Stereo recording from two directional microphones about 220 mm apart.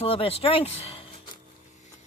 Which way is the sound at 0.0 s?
25° left (ahead or behind).